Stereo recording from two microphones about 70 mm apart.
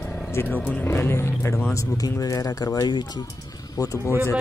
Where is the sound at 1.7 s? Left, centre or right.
Left.